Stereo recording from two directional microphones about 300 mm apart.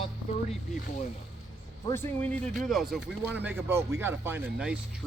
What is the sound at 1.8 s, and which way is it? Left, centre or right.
Speech, centre.